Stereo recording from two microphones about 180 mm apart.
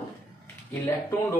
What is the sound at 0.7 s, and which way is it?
Speech, 15° left (ahead or behind).